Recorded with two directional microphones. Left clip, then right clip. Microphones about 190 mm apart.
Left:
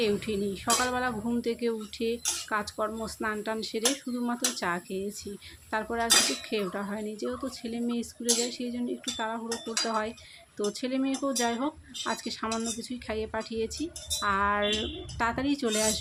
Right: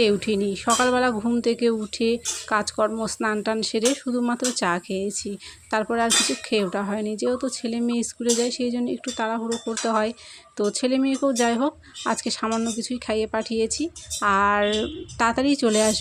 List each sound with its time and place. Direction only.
0.0 s speech: 40° right (ahead or behind)